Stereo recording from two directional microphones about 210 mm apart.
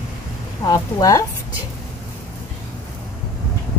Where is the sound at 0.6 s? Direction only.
15° left (ahead or behind).